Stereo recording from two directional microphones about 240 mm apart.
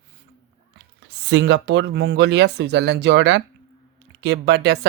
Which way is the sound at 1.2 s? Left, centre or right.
Right.